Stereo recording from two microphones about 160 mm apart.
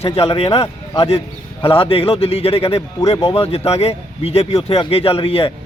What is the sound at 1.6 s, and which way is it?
Speech, 35° left (ahead or behind).